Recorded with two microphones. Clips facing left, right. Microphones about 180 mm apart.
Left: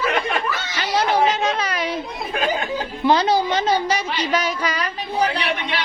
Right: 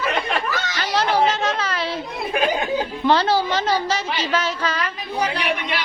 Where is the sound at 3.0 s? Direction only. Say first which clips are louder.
Left 2 dB; 15° left (ahead or behind).